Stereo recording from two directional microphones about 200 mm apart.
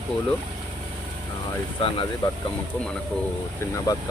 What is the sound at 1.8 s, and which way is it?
Speech, 30° left (ahead or behind).